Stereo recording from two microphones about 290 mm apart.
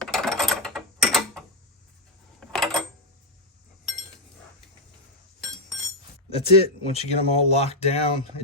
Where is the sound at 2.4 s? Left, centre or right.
Centre.